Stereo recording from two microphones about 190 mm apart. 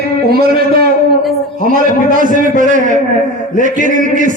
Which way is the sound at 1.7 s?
45° right (ahead or behind).